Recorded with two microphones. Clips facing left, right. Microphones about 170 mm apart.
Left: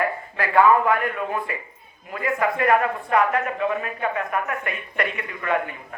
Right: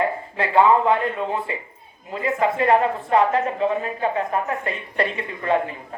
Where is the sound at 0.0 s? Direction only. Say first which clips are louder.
Right 2 dB; 25° right (ahead or behind).